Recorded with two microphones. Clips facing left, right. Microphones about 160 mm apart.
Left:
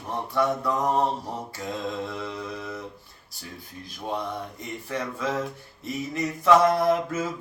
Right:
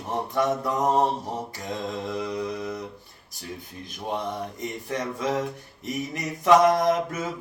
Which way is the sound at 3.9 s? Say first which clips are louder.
Right 1 dB; 20° right (ahead or behind).